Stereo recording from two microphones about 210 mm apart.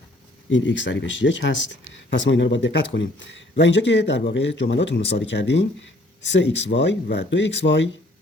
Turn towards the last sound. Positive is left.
turn(degrees=60)  # may be behind; listen again after turning